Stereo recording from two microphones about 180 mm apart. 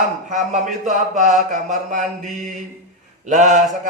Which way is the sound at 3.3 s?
45° right (ahead or behind).